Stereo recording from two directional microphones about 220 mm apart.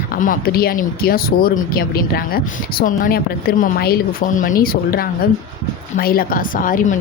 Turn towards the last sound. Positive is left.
turn(degrees=40)  # may be behind; listen again after turning